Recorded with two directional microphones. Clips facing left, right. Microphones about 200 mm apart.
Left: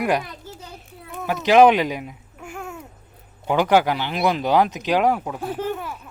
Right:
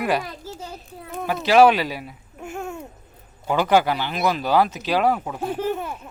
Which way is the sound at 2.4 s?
25° right (ahead or behind).